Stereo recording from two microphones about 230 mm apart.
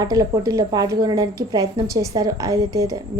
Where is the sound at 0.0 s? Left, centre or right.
Centre.